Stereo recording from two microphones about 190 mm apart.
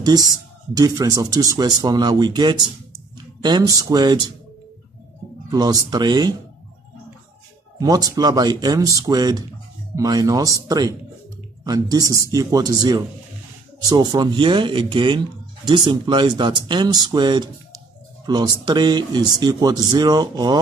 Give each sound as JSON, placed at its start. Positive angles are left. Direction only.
{"t": 0.0, "sound": "speech", "side_deg": -20}
{"t": 5.5, "sound": "speech", "side_deg": -20}
{"t": 7.8, "sound": "speech", "side_deg": -20}